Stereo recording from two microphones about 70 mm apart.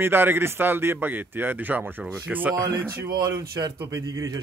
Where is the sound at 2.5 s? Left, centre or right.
Right.